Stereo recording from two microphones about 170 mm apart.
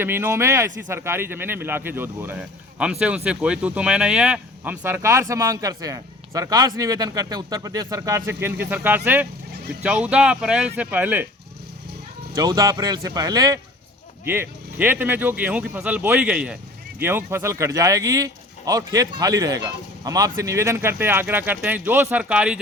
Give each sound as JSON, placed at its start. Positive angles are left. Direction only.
{"t": 0.0, "sound": "speech", "side_deg": -15}
{"t": 12.3, "sound": "speech", "side_deg": -20}